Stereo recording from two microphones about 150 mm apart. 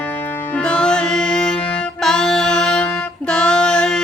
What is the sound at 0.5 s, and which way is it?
Music, 5° left (ahead or behind).